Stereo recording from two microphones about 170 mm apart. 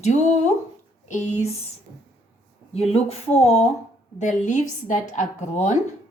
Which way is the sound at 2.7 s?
35° left (ahead or behind).